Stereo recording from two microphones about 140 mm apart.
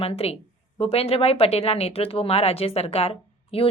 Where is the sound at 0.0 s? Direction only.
45° left (ahead or behind).